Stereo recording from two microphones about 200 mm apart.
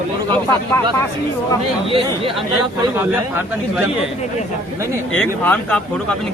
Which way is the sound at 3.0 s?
10° right (ahead or behind).